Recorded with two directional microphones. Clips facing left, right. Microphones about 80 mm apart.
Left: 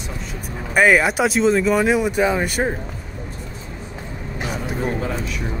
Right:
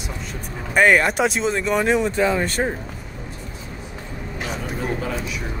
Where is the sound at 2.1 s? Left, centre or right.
Centre.